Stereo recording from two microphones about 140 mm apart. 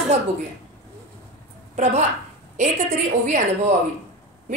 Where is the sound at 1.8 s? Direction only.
50° right (ahead or behind).